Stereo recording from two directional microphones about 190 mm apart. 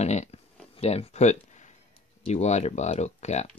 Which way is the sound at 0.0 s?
35° left (ahead or behind).